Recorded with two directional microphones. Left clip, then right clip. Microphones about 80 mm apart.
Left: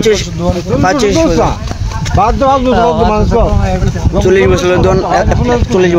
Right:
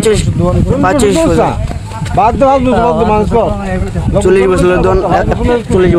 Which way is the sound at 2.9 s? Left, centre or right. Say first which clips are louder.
Even; centre.